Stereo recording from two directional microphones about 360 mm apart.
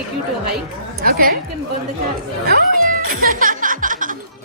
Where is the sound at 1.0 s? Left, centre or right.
Right.